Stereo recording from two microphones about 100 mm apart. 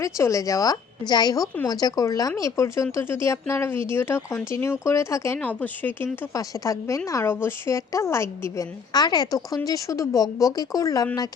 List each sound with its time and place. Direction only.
0.0 s speech: 30° left (ahead or behind)
5.4 s speech: 15° left (ahead or behind)
6.3 s speech: 35° left (ahead or behind)
8.9 s speech: 45° left (ahead or behind)